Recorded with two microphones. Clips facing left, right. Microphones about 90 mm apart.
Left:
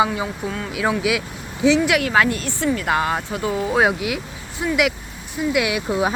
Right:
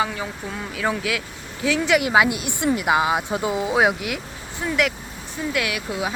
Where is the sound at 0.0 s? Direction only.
15° left (ahead or behind).